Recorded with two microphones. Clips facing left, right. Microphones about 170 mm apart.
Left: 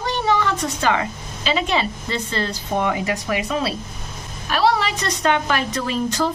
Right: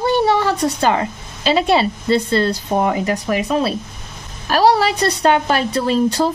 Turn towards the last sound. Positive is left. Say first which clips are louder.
# right 6 dB
turn(degrees=-35)  # may be behind; listen again after turning